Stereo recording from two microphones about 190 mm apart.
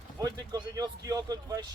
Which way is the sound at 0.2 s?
20° right (ahead or behind).